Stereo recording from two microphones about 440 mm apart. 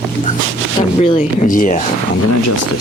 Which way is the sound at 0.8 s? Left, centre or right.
Centre.